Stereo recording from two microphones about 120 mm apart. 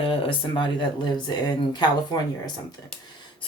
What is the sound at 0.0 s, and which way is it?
Speech, 45° left (ahead or behind).